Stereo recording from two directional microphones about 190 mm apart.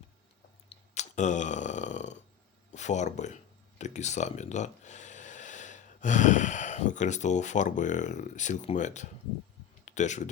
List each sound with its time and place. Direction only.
0.7 s burping: 40° left (ahead or behind)
2.7 s speech: 40° left (ahead or behind)
9.8 s a sound: 40° left (ahead or behind)